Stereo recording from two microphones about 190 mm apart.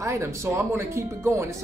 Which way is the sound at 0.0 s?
15° right (ahead or behind).